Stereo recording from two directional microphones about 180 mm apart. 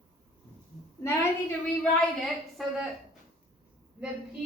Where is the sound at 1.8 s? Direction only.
Centre (ahead or behind).